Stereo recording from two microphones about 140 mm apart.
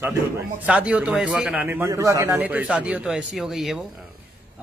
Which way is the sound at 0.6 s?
10° right (ahead or behind).